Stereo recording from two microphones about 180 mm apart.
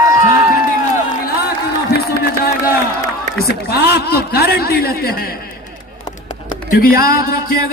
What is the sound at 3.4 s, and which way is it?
A man's voice, 60° left (ahead or behind).